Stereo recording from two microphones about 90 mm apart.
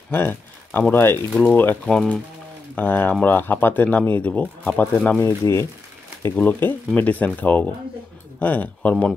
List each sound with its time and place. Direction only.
0.1 s speech: 25° left (ahead or behind)
1.9 s speech: 5° left (ahead or behind)
2.7 s speech: 20° left (ahead or behind)
5.2 s speech: 30° left (ahead or behind)
6.3 s speech: 20° left (ahead or behind)